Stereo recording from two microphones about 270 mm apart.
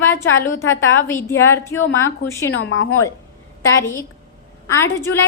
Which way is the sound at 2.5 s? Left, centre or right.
Left.